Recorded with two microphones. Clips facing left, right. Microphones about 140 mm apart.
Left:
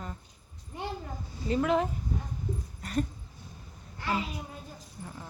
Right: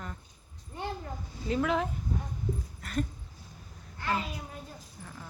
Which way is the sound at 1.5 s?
Centre (ahead or behind).